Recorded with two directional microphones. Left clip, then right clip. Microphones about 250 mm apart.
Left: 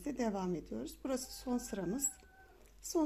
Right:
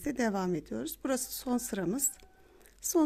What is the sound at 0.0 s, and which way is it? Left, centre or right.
Speech, right.